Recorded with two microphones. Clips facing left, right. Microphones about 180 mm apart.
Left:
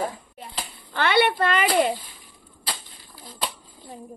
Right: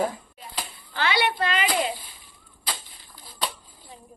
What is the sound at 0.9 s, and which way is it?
Speech, 55° left (ahead or behind).